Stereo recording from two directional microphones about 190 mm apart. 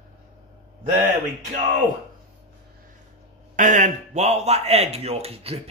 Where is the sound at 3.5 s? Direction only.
40° right (ahead or behind).